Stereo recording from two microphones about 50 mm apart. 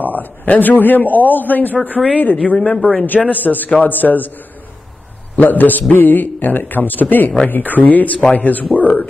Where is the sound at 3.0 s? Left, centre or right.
Left.